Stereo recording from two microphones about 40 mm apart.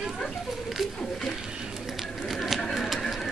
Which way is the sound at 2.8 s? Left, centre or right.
Centre.